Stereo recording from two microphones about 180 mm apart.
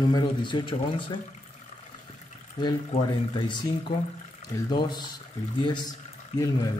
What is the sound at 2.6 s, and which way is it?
Speech, 25° left (ahead or behind).